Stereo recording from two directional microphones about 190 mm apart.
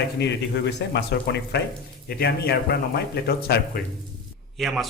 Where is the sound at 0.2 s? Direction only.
65° left (ahead or behind).